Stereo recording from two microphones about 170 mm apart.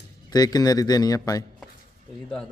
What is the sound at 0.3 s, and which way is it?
Speech, 25° left (ahead or behind).